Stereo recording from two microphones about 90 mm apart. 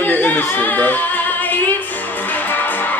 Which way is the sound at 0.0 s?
20° left (ahead or behind).